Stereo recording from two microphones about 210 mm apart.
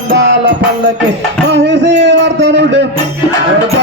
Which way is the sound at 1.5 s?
55° right (ahead or behind).